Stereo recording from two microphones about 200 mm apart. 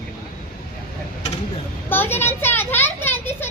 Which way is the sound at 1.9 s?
10° left (ahead or behind).